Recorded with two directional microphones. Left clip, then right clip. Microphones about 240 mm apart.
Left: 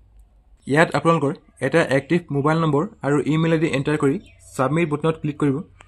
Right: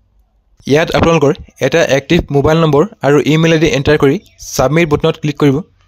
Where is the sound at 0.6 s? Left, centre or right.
Right.